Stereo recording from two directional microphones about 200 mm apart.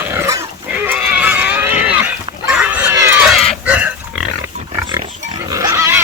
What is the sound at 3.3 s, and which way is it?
Pig, centre (ahead or behind).